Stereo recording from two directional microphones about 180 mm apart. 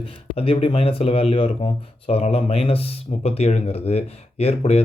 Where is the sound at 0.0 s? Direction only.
30° left (ahead or behind).